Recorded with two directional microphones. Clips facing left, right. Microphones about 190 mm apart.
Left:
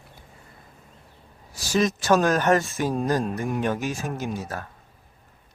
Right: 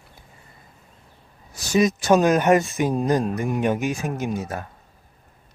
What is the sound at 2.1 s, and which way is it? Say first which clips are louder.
Speech: right 3 dB; 15° right (ahead or behind).